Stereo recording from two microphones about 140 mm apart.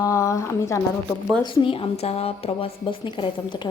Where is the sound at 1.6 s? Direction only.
40° left (ahead or behind).